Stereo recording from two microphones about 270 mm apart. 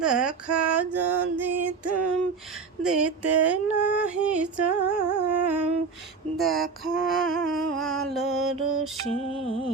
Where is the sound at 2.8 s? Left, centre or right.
Centre.